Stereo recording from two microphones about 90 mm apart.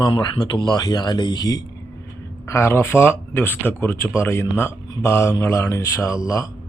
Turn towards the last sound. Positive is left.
turn(degrees=35)  # may be behind; listen again after turning